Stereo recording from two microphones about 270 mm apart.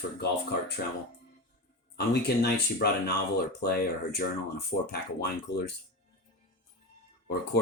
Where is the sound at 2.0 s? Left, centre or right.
Left.